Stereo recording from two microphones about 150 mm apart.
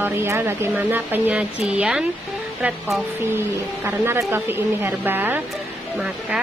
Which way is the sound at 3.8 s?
15° right (ahead or behind).